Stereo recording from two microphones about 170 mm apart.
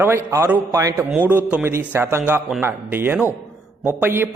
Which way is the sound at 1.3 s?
10° right (ahead or behind).